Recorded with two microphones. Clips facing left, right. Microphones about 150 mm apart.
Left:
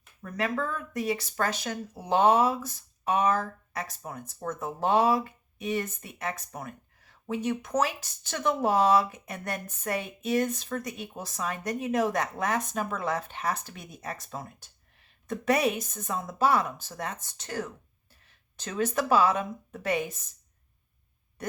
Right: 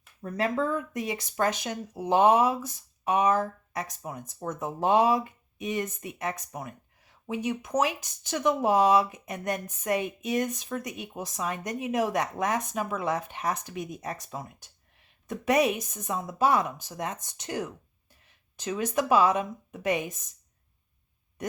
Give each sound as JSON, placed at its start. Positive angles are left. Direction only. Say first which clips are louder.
{"t": 0.2, "sound": "speech", "louder": "right 3 dB", "side_deg": -30}